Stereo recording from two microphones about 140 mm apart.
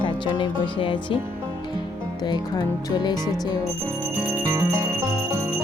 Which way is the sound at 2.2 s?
30° left (ahead or behind).